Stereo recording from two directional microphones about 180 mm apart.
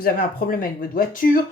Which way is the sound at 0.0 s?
50° left (ahead or behind).